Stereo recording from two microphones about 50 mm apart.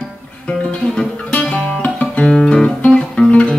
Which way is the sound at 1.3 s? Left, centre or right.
Left.